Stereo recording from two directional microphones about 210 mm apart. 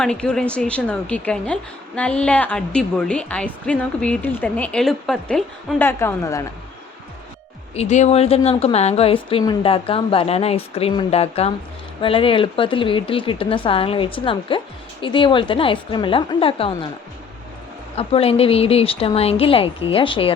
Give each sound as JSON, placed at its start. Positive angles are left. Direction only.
{"t": 0.0, "sound": "a woman's voice", "side_deg": 5}
{"t": 7.8, "sound": "a woman's voice", "side_deg": 35}
{"t": 17.9, "sound": "a woman's voice", "side_deg": 30}